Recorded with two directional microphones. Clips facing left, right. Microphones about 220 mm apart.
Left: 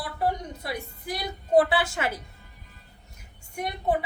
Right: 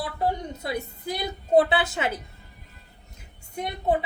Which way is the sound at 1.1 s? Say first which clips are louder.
Right 1 dB; 20° right (ahead or behind).